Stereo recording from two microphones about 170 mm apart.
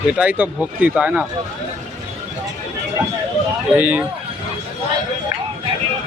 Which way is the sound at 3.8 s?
10° right (ahead or behind).